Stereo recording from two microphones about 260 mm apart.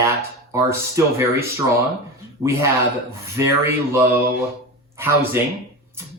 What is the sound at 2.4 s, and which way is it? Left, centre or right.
Speech, centre.